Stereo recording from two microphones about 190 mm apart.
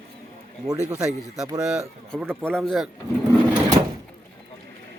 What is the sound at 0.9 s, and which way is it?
Speech, 5° right (ahead or behind).